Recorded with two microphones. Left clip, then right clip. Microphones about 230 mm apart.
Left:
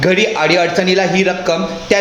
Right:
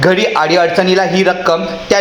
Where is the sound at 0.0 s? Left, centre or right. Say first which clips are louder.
Right 2 dB; centre.